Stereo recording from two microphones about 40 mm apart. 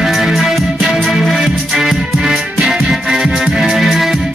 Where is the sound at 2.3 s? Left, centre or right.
Right.